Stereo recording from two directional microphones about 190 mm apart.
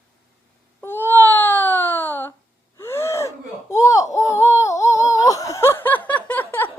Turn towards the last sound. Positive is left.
turn(degrees=10)  # may be behind; listen again after turning